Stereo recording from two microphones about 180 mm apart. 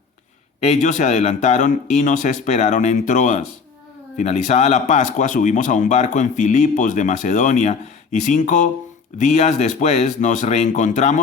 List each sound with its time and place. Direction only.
0.6 s speech: 40° left (ahead or behind)